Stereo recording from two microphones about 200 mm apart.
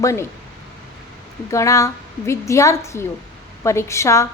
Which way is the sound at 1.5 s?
15° left (ahead or behind).